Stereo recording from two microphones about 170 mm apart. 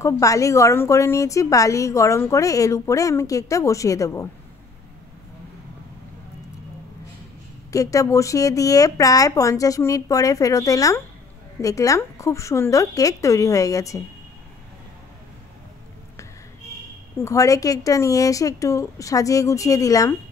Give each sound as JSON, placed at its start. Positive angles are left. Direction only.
{"t": 0.0, "sound": "a woman's voice", "side_deg": 20}
{"t": 7.7, "sound": "a woman's voice", "side_deg": 20}
{"t": 17.2, "sound": "a woman's voice", "side_deg": 20}